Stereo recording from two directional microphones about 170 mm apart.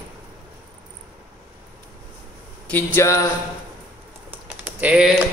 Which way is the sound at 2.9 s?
15° left (ahead or behind).